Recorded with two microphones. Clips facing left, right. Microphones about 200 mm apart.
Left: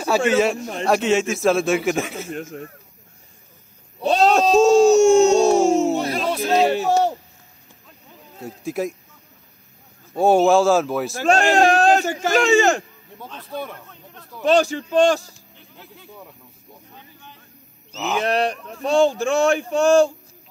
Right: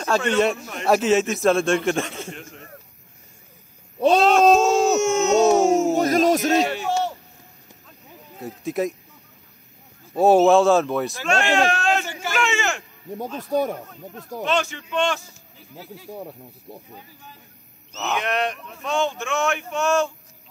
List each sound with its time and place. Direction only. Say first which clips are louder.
0.0 s a man's voice: left 2 dB; 5° left (ahead or behind)
4.2 s speech: left 2 dB; 40° left (ahead or behind)
4.6 s a sound: left 6 dB; 35° left (ahead or behind)
5.9 s a sound: right 5 dB; 45° right (ahead or behind)
6.5 s a sound: left 4 dB; 35° left (ahead or behind)
8.4 s a man's voice: right 1 dB; centre (ahead or behind)
10.1 s a man's voice: right 1 dB; centre (ahead or behind)
11.2 s speech: left 6 dB; 35° left (ahead or behind)
13.4 s speech: right 8 dB; 45° right (ahead or behind)
14.4 s speech: left 7 dB; 35° left (ahead or behind)
16.1 s speech: right 8 dB; 35° right (ahead or behind)
17.9 s speech: left 2 dB; 5° left (ahead or behind)
18.2 s speech: left 4 dB; 35° left (ahead or behind)